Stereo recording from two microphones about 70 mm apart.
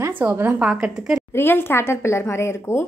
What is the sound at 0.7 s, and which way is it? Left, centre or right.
Speech, centre.